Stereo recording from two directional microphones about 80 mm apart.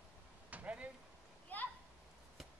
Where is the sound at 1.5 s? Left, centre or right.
Left.